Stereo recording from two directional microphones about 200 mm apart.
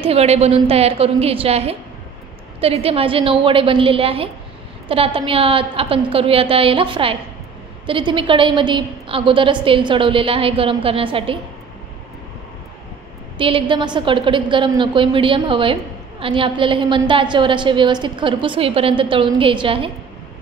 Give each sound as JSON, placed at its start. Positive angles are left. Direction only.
{"t": 0.0, "sound": "a woman's voice", "side_deg": -30}
{"t": 13.4, "sound": "a woman's voice", "side_deg": -25}